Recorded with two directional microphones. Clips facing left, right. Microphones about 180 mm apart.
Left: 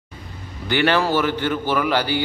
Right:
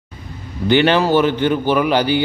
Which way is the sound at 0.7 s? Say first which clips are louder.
Right 5 dB; 20° right (ahead or behind).